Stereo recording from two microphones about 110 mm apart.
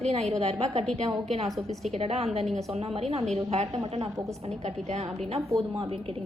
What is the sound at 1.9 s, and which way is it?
A woman's voice, 65° right (ahead or behind).